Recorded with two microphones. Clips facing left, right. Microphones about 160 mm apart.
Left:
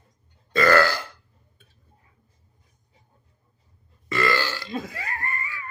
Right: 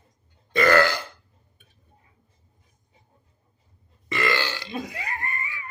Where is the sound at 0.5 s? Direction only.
20° right (ahead or behind).